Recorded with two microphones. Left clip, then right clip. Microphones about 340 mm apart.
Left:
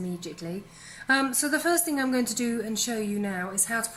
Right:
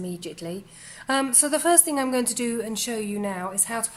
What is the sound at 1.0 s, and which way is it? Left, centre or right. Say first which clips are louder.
Speech: even; centre.